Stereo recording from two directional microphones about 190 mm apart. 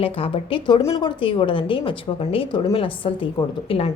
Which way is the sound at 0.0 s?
30° left (ahead or behind).